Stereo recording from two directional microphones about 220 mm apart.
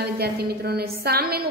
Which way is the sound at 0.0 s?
45° right (ahead or behind).